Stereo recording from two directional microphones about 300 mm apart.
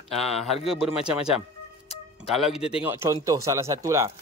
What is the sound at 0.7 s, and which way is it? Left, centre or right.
Speech, centre.